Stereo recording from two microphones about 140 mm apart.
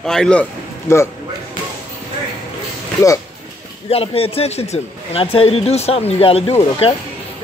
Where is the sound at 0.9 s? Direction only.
20° left (ahead or behind).